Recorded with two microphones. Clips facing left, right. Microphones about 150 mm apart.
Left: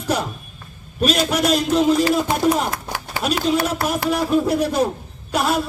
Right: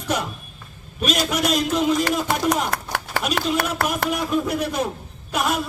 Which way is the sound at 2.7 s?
65° right (ahead or behind).